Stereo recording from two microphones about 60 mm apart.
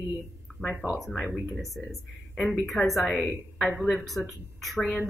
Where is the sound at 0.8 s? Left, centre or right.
Right.